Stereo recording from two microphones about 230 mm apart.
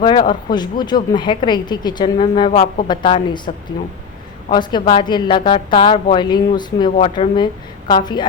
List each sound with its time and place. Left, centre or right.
0.0 s speech: centre